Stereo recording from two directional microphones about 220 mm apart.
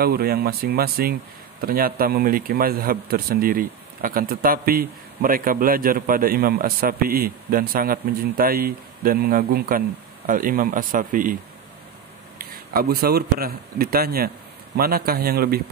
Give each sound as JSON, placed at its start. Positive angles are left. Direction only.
{"t": 0.0, "sound": "a man's voice", "side_deg": -45}
{"t": 12.5, "sound": "a man's voice", "side_deg": -45}